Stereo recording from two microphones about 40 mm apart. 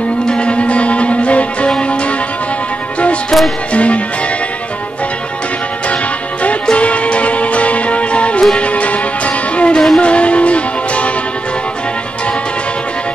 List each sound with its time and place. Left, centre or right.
0.3 s music: left
3.7 s music: left
6.6 s music: left